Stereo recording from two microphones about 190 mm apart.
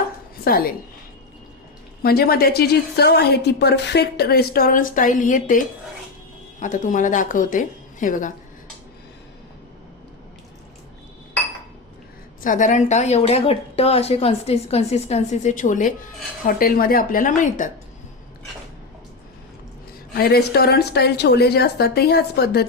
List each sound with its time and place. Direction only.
0.4 s a woman's voice: 50° left (ahead or behind)
2.0 s a woman's voice: 55° left (ahead or behind)
12.4 s a woman's voice: 45° left (ahead or behind)
20.1 s a woman's voice: 55° left (ahead or behind)